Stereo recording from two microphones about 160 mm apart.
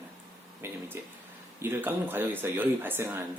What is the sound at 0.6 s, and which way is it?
Speech, 15° right (ahead or behind).